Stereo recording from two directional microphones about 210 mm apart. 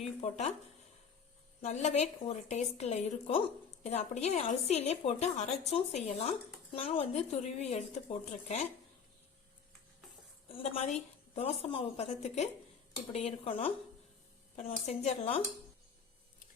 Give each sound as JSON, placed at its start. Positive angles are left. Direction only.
{"t": 0.2, "sound": "a woman's voice", "side_deg": 30}
{"t": 1.6, "sound": "a woman's voice", "side_deg": 35}
{"t": 10.5, "sound": "a woman's voice", "side_deg": 30}